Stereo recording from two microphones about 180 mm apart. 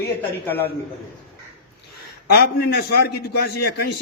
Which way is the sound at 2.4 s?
60° left (ahead or behind).